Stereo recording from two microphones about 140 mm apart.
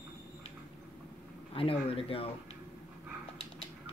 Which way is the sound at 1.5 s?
40° left (ahead or behind).